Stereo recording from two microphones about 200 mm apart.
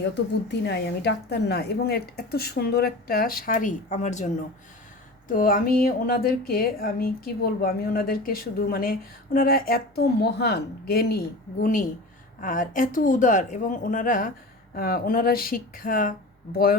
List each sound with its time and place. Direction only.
0.0 s a woman's voice: 60° left (ahead or behind); by 4.3 s 35° left (ahead or behind)
5.3 s a woman's voice: 45° left (ahead or behind)